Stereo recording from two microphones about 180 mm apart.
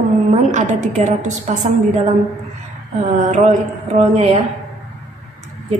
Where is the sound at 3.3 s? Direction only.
40° right (ahead or behind).